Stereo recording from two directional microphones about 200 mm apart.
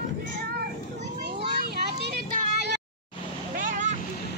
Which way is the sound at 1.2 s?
55° right (ahead or behind).